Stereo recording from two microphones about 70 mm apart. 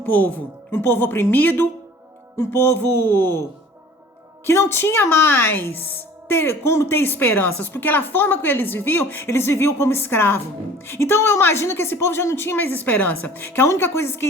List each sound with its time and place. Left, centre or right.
0.0 s a woman's voice: left
2.3 s a woman's voice: left
4.4 s a woman's voice: left